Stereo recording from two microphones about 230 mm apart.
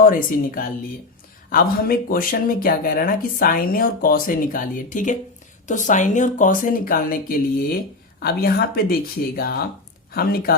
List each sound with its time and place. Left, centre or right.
0.0 s speech: left